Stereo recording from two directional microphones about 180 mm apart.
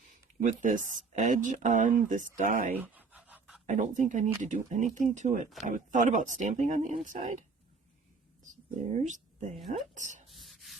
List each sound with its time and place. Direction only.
0.4 s speech: 45° right (ahead or behind)
2.7 s scratch: 10° right (ahead or behind)
3.7 s speech: 45° right (ahead or behind)
8.4 s speech: 40° right (ahead or behind)
10.2 s rub: centre (ahead or behind)